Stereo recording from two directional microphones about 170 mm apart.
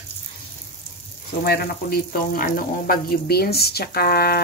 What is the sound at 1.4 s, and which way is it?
Speech, 65° left (ahead or behind).